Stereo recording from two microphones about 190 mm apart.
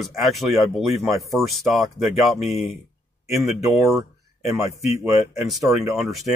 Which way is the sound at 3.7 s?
Centre (ahead or behind).